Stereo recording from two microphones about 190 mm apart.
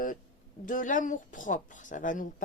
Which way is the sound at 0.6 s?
45° left (ahead or behind).